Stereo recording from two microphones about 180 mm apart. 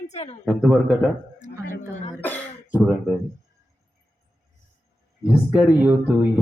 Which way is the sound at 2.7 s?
5° right (ahead or behind).